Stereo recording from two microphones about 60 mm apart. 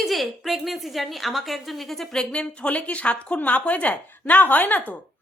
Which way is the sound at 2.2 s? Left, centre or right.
Centre.